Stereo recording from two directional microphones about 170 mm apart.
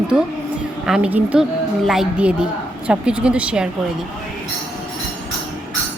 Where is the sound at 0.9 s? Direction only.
5° right (ahead or behind).